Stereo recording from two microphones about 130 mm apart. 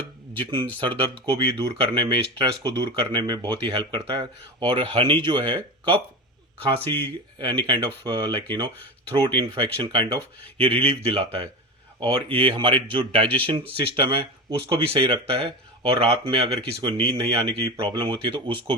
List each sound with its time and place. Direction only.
0.0 s speech: 40° right (ahead or behind)
6.8 s speech: 15° left (ahead or behind)
7.3 s speech: 40° right (ahead or behind)